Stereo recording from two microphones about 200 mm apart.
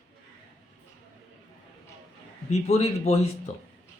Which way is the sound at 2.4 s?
30° left (ahead or behind).